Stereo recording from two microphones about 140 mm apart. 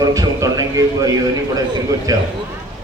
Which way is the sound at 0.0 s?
25° right (ahead or behind).